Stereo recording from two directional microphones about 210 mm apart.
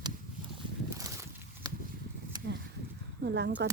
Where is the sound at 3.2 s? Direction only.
55° right (ahead or behind).